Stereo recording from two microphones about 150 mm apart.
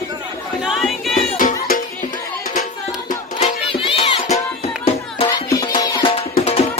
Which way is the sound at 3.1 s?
50° left (ahead or behind).